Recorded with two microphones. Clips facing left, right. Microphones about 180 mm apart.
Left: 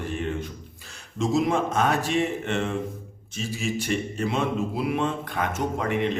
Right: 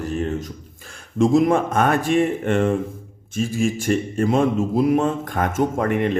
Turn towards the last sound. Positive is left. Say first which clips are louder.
# right 5 dB
turn(degrees=-50)  # may be behind; listen again after turning